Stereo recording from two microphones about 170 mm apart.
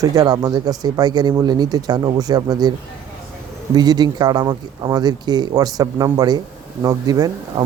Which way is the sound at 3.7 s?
25° right (ahead or behind).